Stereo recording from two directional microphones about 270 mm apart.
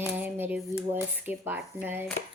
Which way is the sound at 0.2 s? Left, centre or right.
Centre.